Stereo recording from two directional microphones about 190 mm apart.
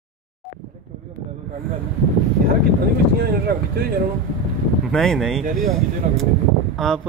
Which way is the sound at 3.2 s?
55° right (ahead or behind).